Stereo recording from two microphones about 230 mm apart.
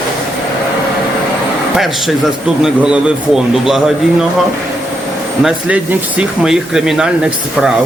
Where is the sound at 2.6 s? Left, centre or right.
Centre.